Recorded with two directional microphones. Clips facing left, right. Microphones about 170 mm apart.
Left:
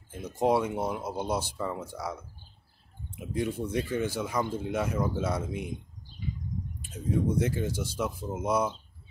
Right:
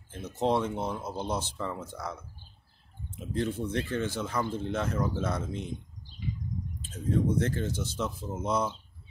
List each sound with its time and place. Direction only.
0.1 s speech: 10° left (ahead or behind)
6.8 s speech: 10° left (ahead or behind)